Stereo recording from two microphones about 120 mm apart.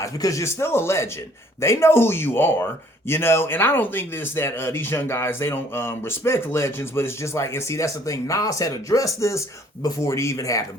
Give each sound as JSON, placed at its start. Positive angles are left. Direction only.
{"t": 0.0, "sound": "speech", "side_deg": 25}